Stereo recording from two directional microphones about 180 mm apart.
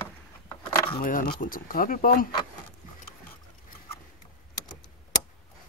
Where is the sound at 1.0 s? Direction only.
50° left (ahead or behind).